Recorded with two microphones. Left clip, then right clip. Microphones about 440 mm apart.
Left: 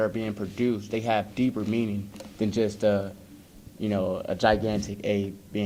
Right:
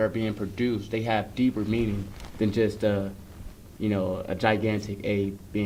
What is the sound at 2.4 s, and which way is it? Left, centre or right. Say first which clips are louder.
A man's voice: even; left.